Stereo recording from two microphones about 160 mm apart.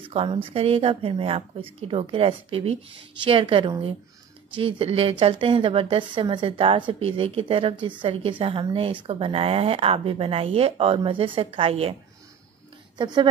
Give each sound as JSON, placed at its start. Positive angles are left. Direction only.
{"t": 0.0, "sound": "a woman's voice", "side_deg": -35}
{"t": 12.9, "sound": "a woman's voice", "side_deg": -30}